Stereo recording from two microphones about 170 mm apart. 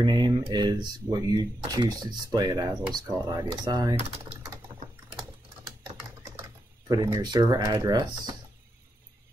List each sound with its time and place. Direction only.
0.0 s speech: 25° right (ahead or behind)
6.9 s speech: 20° right (ahead or behind)